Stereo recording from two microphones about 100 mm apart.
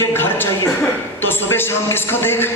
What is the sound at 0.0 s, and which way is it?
A woman's voice, 20° left (ahead or behind).